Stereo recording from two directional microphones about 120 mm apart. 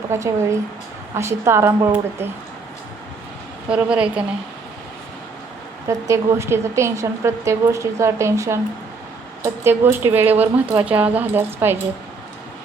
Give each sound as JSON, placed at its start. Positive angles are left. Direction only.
{"t": 0.1, "sound": "speech", "side_deg": -25}
{"t": 3.7, "sound": "a woman's voice", "side_deg": -10}
{"t": 5.9, "sound": "a woman's voice", "side_deg": -25}